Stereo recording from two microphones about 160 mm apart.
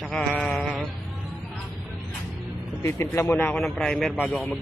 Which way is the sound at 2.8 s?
15° left (ahead or behind).